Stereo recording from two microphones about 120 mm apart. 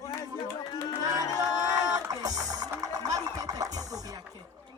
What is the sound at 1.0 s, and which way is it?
Music, 30° right (ahead or behind).